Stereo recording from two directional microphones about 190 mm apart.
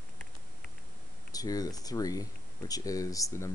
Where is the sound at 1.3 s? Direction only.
20° left (ahead or behind).